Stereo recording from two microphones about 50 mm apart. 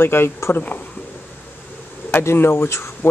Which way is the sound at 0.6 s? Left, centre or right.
Left.